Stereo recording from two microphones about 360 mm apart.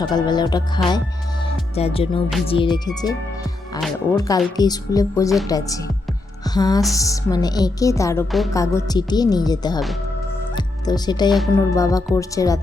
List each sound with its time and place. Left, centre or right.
0.0 s speech: centre
1.5 s music: centre
2.5 s speech: centre